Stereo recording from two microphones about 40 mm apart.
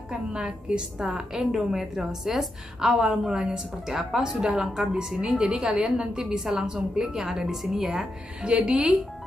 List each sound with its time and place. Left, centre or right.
0.1 s a woman's voice: centre
8.4 s a woman's voice: right